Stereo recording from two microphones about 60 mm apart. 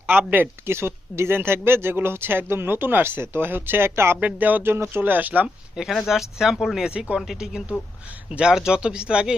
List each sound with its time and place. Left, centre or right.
0.1 s speech: right
4.2 s speech: right
4.6 s speech: right
5.9 s speech: centre